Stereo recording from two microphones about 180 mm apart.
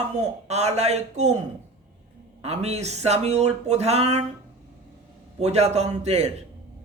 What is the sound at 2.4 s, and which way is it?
Speech, 35° right (ahead or behind).